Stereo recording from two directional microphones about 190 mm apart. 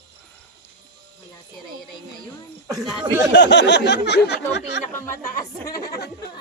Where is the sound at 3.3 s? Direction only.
70° left (ahead or behind).